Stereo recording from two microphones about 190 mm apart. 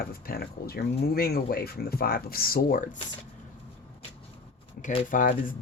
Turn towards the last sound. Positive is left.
turn(degrees=45)  # may be behind; listen again after turning